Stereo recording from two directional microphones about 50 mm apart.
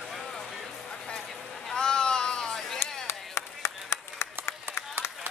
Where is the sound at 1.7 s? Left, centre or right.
Centre.